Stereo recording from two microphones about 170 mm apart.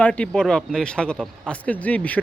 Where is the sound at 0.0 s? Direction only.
5° left (ahead or behind).